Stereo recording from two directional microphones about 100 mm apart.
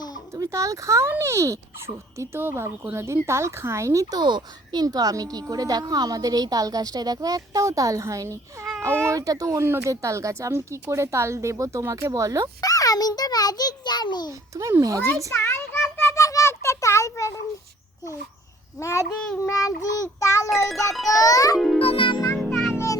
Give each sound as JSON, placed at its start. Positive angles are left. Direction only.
{"t": 0.3, "sound": "speech", "side_deg": -35}
{"t": 4.2, "sound": "speech", "side_deg": -50}
{"t": 12.6, "sound": "a child's voice", "side_deg": 35}
{"t": 14.5, "sound": "speech", "side_deg": -30}
{"t": 15.3, "sound": "a sound", "side_deg": 25}
{"t": 18.8, "sound": "a child's voice", "side_deg": 30}
{"t": 21.8, "sound": "music", "side_deg": 65}
{"t": 22.4, "sound": "music", "side_deg": 5}
{"t": 22.7, "sound": "music", "side_deg": 30}